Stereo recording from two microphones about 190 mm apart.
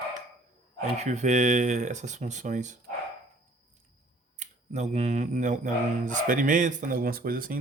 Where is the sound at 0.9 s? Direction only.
40° right (ahead or behind).